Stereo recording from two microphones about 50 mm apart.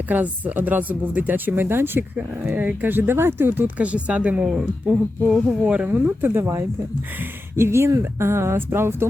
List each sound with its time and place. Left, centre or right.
0.1 s speech: right
1.6 s speech: right
3.8 s speech: right
5.8 s speech: right
7.5 s speech: right